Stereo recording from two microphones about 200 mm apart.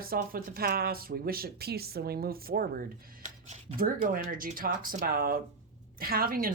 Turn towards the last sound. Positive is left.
turn(degrees=-45)  # may be behind; listen again after turning